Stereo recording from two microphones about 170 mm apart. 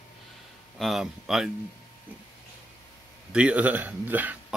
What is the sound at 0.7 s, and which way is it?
Speech, centre (ahead or behind).